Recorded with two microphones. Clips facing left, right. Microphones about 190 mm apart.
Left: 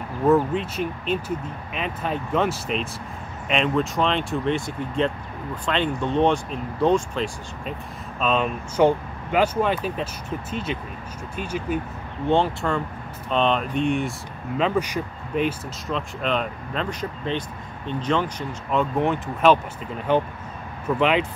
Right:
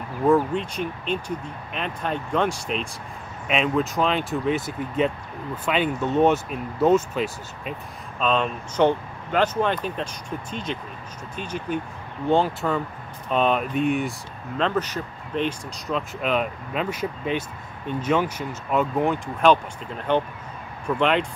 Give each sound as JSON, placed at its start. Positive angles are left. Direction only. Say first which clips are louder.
{"t": 0.3, "sound": "speech", "louder": "left 1 dB", "side_deg": 5}
{"t": 12.3, "sound": "speech", "louder": "even", "side_deg": 0}
{"t": 14.6, "sound": "speech", "louder": "left 1 dB", "side_deg": 10}
{"t": 15.9, "sound": "speech", "louder": "right 1 dB", "side_deg": -5}